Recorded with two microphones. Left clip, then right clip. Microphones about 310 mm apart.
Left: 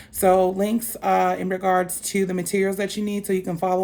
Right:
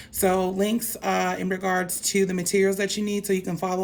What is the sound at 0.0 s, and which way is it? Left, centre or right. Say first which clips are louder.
Speech: left 5 dB; centre.